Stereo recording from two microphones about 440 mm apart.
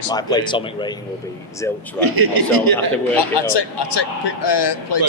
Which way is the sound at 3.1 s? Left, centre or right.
Left.